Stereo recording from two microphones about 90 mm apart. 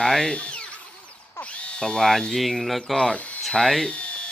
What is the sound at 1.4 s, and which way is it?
Speech, 15° left (ahead or behind).